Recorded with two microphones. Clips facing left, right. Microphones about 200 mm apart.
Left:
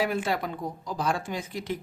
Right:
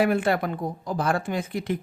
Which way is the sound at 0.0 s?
60° right (ahead or behind).